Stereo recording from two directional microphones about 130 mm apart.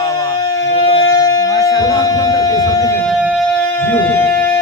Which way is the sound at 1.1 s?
30° left (ahead or behind).